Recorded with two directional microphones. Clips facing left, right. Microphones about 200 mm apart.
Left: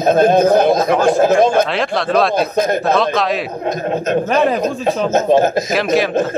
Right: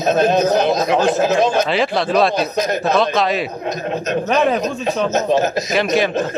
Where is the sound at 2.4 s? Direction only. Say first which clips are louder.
Left 3 dB; 55° left (ahead or behind).